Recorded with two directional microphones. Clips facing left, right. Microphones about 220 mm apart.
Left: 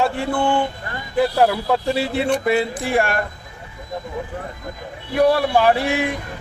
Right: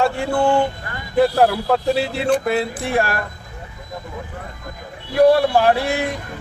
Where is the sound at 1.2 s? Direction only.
Centre (ahead or behind).